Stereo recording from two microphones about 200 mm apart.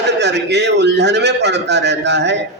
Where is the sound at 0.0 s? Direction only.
60° right (ahead or behind).